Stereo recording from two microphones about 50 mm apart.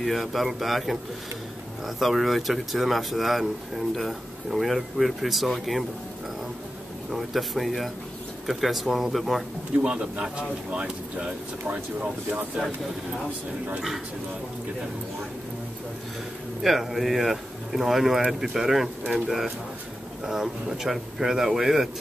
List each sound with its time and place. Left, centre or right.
0.0 s speech: centre
2.0 s speech: centre
7.1 s speech: centre
9.8 s speech: centre
16.6 s speech: centre